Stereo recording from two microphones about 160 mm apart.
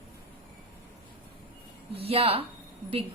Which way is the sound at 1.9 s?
40° right (ahead or behind).